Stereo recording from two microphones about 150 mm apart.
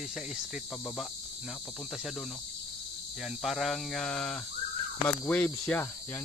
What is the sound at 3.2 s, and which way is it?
Speech, centre (ahead or behind).